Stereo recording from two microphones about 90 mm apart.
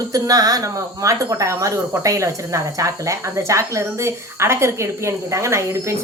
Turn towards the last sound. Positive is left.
turn(degrees=-30)  # may be behind; listen again after turning